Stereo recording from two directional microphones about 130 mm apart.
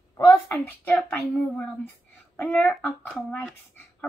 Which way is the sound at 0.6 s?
15° left (ahead or behind).